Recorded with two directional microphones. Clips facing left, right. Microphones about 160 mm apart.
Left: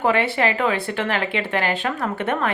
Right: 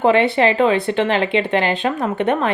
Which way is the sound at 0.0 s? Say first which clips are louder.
Right 5 dB; 25° right (ahead or behind).